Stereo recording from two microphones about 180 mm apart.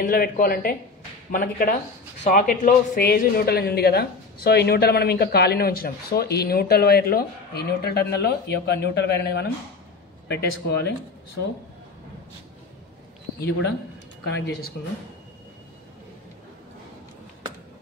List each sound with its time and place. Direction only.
0.0 s a man's voice: 55° left (ahead or behind)
14.2 s speech: 65° left (ahead or behind)